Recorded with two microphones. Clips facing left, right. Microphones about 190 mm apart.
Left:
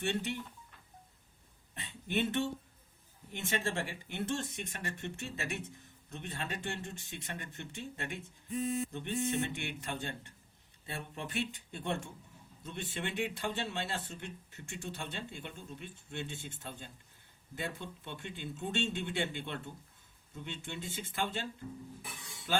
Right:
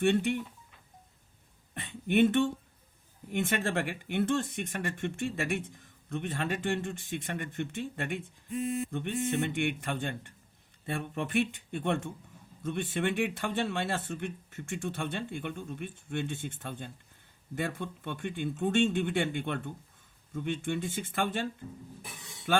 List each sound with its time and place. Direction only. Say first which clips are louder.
0.0 s speech: right 9 dB; 50° right (ahead or behind)
1.7 s a sound: right 8 dB; 55° right (ahead or behind)
3.3 s speech: right 6 dB; 60° right (ahead or behind)